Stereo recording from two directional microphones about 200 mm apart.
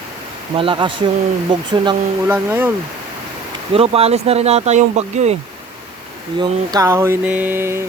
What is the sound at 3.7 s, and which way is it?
Speech, 30° right (ahead or behind).